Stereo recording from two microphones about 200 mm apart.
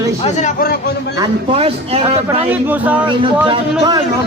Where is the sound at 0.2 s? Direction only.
35° left (ahead or behind); by 1.1 s 50° left (ahead or behind).